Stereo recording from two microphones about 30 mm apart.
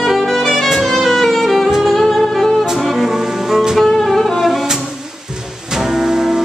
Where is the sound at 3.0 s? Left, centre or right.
Centre.